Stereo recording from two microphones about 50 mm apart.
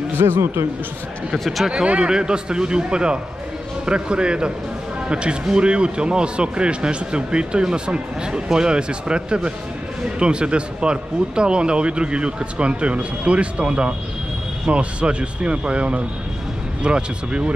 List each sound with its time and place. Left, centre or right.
0.2 s speech: right
1.3 s speech: centre
1.7 s a man's voice: centre